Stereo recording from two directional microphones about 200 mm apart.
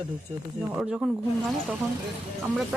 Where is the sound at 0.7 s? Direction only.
5° right (ahead or behind).